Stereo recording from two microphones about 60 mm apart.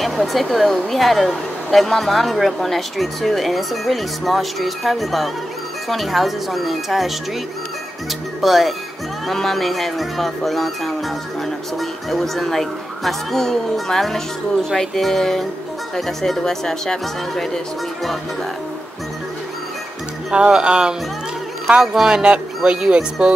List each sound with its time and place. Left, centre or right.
0.0 s a woman's voice: centre
8.4 s a woman's voice: centre
20.2 s speech: centre